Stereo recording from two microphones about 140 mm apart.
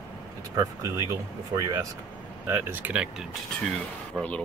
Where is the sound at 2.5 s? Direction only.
15° right (ahead or behind).